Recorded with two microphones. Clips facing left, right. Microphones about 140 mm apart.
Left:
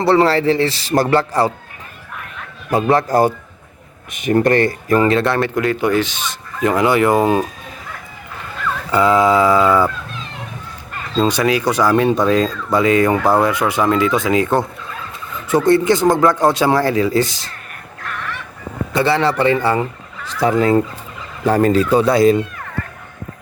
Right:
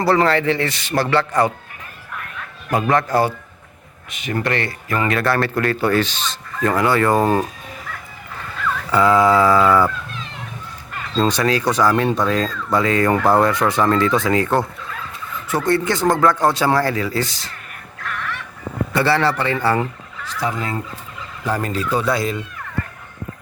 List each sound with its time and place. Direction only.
0.0 s a man's voice: 30° left (ahead or behind)
2.6 s speech: 30° left (ahead or behind)
4.1 s a man's voice: 50° left (ahead or behind)
5.1 s speech: 20° left (ahead or behind)
8.9 s speech: 15° left (ahead or behind)
11.2 s speech: 15° left (ahead or behind)
18.9 s speech: 20° left (ahead or behind)